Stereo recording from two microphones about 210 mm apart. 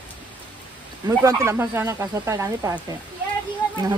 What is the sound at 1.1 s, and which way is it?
Speech, 15° right (ahead or behind).